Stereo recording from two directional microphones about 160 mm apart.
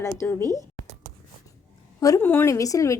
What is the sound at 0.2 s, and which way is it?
Speech, 15° left (ahead or behind).